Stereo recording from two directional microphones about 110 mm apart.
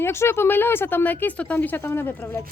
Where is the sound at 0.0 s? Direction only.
25° left (ahead or behind).